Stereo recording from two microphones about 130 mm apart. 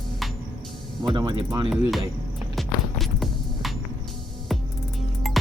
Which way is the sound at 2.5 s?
Centre (ahead or behind).